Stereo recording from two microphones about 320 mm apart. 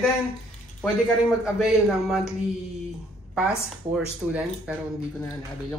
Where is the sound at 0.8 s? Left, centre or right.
Centre.